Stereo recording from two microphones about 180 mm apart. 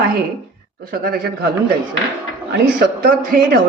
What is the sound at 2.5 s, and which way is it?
Speech, 65° right (ahead or behind).